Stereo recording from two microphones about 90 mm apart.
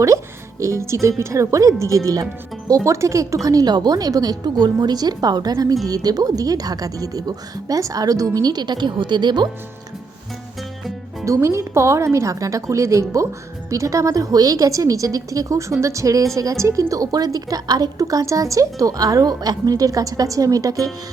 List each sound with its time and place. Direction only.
0.6 s a woman's voice: 35° right (ahead or behind); by 9.5 s 55° right (ahead or behind)
11.3 s a woman's voice: 30° right (ahead or behind)